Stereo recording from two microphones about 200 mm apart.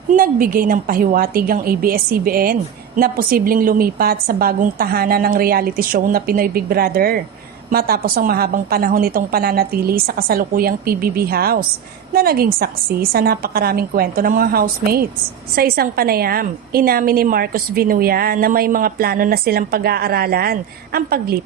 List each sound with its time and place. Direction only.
0.1 s a woman's voice: 45° right (ahead or behind)